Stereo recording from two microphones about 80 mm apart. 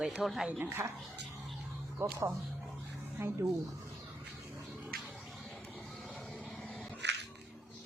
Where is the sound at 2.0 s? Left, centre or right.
Right.